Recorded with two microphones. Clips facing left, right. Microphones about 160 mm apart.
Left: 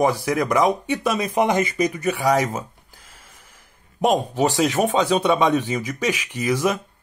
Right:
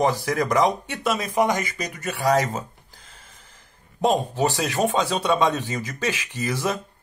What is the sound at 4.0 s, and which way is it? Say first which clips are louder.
Speech: left 2 dB; 10° left (ahead or behind).